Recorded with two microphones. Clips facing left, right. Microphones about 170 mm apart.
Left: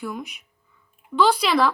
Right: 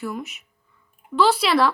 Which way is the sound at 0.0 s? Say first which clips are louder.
Right 1 dB; 5° right (ahead or behind).